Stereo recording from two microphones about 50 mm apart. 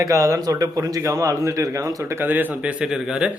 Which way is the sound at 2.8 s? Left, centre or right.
Centre.